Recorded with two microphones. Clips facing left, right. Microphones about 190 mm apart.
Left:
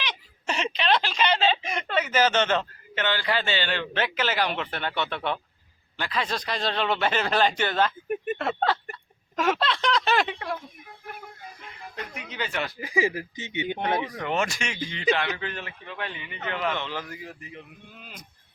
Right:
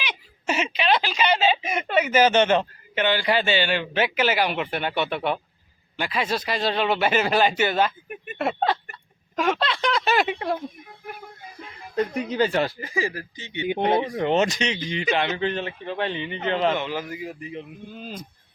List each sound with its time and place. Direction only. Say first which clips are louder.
0.0 s speech: right 3 dB; 10° right (ahead or behind)
8.1 s a sound: left 9 dB; 45° left (ahead or behind)
8.4 s speech: right 7 dB; 15° right (ahead or behind)
9.3 s speech: right 1 dB; centre (ahead or behind)
10.3 s speech: right 6 dB; 30° right (ahead or behind)
11.9 s speech: right 13 dB; 35° right (ahead or behind)
12.8 s speech: left 2 dB; 15° left (ahead or behind)
13.7 s speech: right 8 dB; 30° right (ahead or behind)
16.7 s speech: right 5 dB; 10° right (ahead or behind); by 18.3 s 30° right (ahead or behind)